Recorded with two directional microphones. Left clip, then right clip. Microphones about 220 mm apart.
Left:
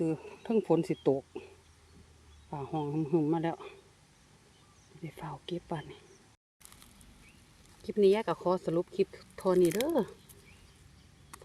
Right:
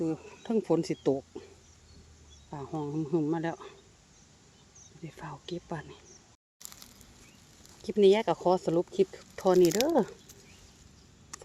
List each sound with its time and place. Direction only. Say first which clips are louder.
0.0 s speech: even; 10° left (ahead or behind)
2.5 s speech: left 1 dB; centre (ahead or behind)
5.0 s speech: even; centre (ahead or behind)
7.8 s speech: right 3 dB; 30° right (ahead or behind)
11.3 s a sound: right 5 dB; 10° right (ahead or behind)